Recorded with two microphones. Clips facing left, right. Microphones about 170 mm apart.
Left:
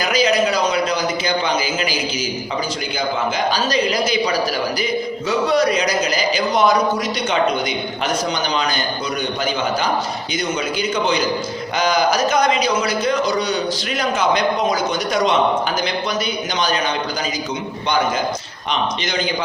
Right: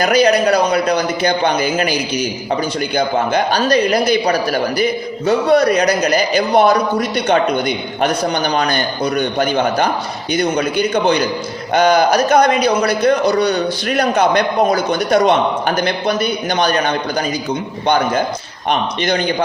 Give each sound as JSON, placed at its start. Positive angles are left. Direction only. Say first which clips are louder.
{"t": 0.0, "sound": "a man's voice", "louder": "right 5 dB", "side_deg": -60}
{"t": 18.7, "sound": "a man's voice", "louder": "right 5 dB", "side_deg": -55}